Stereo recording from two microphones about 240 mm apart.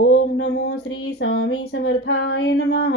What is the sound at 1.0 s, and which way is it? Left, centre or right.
Speech, left.